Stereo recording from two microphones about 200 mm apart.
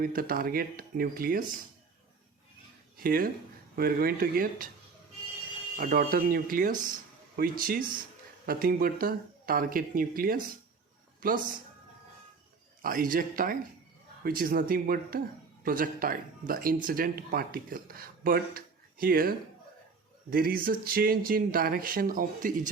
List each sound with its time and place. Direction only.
0.0 s speech: 45° right (ahead or behind)
3.0 s speech: 45° right (ahead or behind)
5.7 s speech: 45° right (ahead or behind)
12.8 s speech: 45° right (ahead or behind)